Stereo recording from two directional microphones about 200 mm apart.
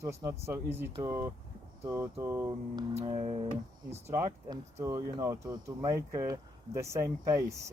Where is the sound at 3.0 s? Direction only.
30° right (ahead or behind).